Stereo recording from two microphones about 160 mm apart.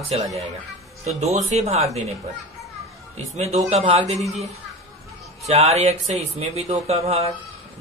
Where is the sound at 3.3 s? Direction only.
45° right (ahead or behind).